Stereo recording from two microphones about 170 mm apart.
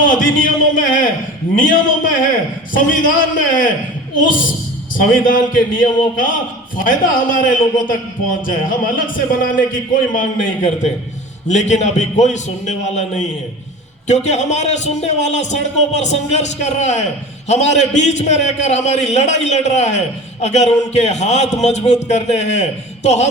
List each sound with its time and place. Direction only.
0.0 s a man's voice: 55° left (ahead or behind)
5.1 s a man's voice: 55° left (ahead or behind)
14.3 s a man's voice: 45° left (ahead or behind)